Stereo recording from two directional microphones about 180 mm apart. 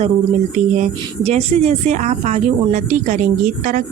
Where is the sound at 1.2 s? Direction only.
35° right (ahead or behind).